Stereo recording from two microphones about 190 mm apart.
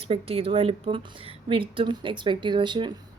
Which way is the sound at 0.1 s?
30° right (ahead or behind).